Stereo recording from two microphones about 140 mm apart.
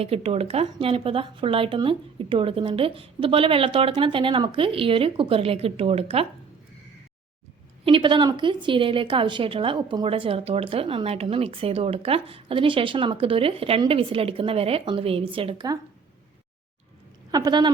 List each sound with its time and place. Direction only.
0.0 s a woman's voice: 45° right (ahead or behind)
7.9 s a woman's voice: 35° right (ahead or behind)
17.3 s speech: 30° right (ahead or behind)